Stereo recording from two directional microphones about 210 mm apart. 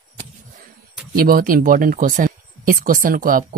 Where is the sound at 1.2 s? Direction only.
45° right (ahead or behind).